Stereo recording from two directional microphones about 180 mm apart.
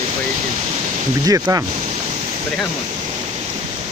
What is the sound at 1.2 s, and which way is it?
Speech, 20° right (ahead or behind).